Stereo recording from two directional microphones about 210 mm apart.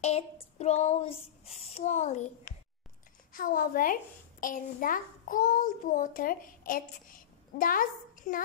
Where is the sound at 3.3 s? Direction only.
40° left (ahead or behind).